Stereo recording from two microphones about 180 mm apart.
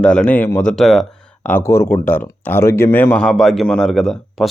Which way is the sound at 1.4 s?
15° left (ahead or behind).